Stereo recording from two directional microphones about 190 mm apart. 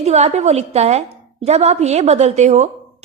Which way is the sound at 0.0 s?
35° right (ahead or behind).